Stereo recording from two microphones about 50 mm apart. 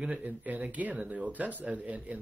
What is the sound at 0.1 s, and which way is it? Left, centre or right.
Speech, right.